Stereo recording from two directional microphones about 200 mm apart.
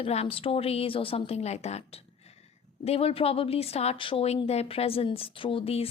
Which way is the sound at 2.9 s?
30° left (ahead or behind).